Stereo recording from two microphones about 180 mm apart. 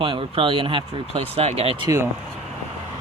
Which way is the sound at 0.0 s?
30° right (ahead or behind).